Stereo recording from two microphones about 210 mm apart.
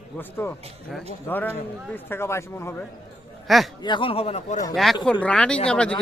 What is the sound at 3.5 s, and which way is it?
Speech, centre (ahead or behind).